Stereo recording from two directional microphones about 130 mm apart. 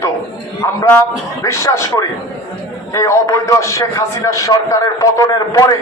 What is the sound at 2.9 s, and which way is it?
A man's voice, 25° left (ahead or behind).